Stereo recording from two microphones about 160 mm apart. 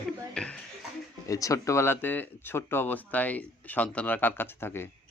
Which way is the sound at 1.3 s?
20° left (ahead or behind).